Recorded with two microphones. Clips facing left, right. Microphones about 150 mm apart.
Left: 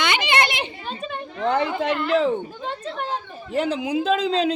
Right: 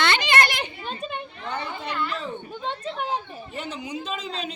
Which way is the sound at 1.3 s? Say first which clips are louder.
Left 10 dB; 90° left.